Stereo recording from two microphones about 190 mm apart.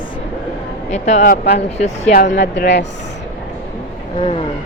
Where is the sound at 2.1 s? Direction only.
55° left (ahead or behind).